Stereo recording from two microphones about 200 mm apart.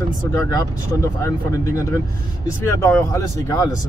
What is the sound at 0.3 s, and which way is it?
Speech, 15° left (ahead or behind).